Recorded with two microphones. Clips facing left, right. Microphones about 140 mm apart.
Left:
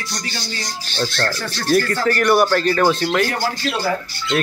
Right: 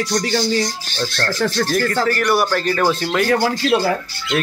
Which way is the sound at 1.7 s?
Centre (ahead or behind).